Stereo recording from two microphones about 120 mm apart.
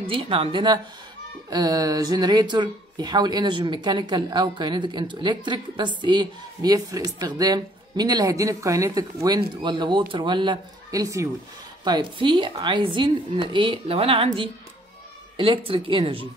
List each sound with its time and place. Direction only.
0.0 s speech: 50° right (ahead or behind)
1.5 s speech: 30° right (ahead or behind)
11.8 s speech: 40° right (ahead or behind)